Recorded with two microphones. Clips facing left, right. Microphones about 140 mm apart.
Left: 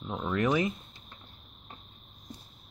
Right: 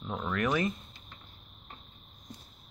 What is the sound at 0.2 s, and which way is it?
Speech, 20° left (ahead or behind).